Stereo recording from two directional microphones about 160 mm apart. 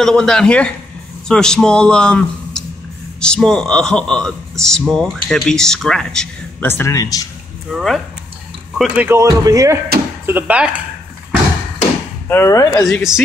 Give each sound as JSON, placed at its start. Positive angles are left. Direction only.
{"t": 0.0, "sound": "speech", "side_deg": 5}
{"t": 6.7, "sound": "speech", "side_deg": 20}
{"t": 7.7, "sound": "a man's voice", "side_deg": 0}
{"t": 12.3, "sound": "speech", "side_deg": 20}
{"t": 12.8, "sound": "speech", "side_deg": 0}